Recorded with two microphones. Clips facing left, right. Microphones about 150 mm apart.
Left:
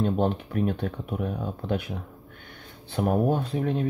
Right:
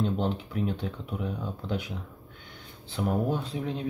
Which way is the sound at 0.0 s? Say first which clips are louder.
Left 4 dB; 55° left (ahead or behind).